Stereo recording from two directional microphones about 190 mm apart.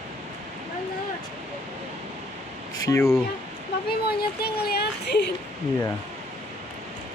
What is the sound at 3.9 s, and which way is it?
Speech, 55° left (ahead or behind).